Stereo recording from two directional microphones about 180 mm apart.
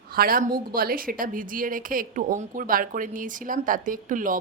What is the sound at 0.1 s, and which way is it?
A woman's voice, 55° right (ahead or behind).